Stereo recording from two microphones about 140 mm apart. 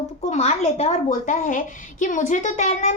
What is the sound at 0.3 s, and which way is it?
A woman's voice, 50° left (ahead or behind).